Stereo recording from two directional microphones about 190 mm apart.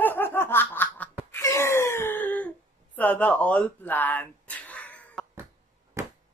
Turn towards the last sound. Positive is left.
turn(degrees=-15)  # may be behind; listen again after turning